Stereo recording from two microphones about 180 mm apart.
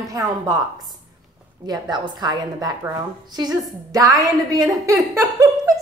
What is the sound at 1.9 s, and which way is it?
A woman's voice, 20° right (ahead or behind).